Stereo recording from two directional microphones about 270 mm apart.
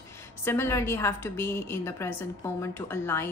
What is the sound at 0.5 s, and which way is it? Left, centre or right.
A woman's voice, centre.